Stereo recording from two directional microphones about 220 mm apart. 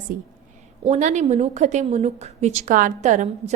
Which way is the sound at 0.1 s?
40° right (ahead or behind).